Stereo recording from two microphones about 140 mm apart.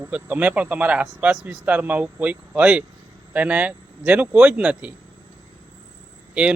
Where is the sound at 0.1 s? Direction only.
10° right (ahead or behind).